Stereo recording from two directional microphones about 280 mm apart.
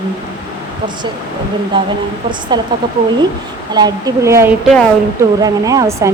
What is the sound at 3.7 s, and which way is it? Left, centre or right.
A woman's voice, centre.